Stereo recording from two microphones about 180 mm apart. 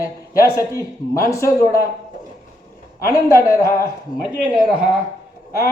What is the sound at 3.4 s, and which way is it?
Speech, 20° left (ahead or behind).